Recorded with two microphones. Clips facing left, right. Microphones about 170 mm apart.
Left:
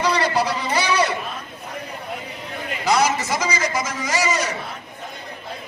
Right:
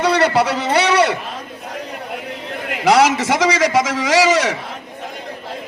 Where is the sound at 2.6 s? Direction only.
75° right (ahead or behind); by 4.5 s 90° right.